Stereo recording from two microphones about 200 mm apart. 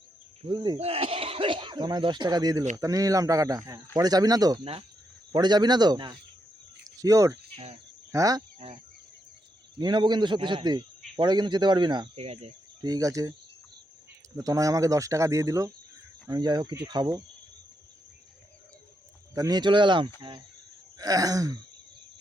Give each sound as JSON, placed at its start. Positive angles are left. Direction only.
{"t": 0.4, "sound": "speech", "side_deg": -20}
{"t": 0.8, "sound": "speech", "side_deg": -30}
{"t": 7.5, "sound": "speech", "side_deg": -30}
{"t": 8.1, "sound": "speech", "side_deg": -15}
{"t": 8.5, "sound": "speech", "side_deg": -30}
{"t": 12.8, "sound": "speech", "side_deg": -15}
{"t": 14.3, "sound": "speech", "side_deg": -15}
{"t": 19.3, "sound": "speech", "side_deg": -20}